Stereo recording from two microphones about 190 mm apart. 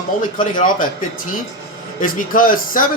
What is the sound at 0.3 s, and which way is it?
Speech, 45° left (ahead or behind).